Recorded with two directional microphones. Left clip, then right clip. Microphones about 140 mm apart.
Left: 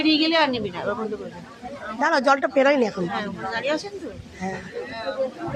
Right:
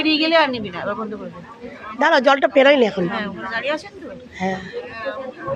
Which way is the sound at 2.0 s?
20° right (ahead or behind).